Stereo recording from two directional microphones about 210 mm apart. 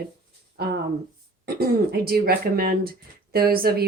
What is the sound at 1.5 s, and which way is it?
A woman's voice, 50° right (ahead or behind).